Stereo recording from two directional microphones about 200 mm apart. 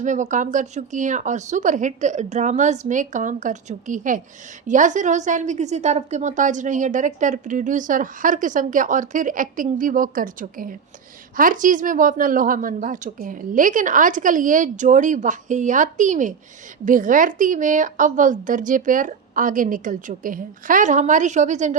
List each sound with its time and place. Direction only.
0.0 s a woman's voice: 40° right (ahead or behind)